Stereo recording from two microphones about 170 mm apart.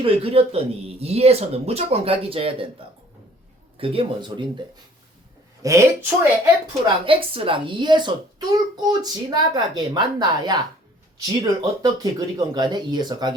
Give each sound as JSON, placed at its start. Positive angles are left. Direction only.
{"t": 0.0, "sound": "speech", "side_deg": -35}
{"t": 3.8, "sound": "a child's voice", "side_deg": -30}
{"t": 5.6, "sound": "speech", "side_deg": -15}
{"t": 7.0, "sound": "a child's voice", "side_deg": -30}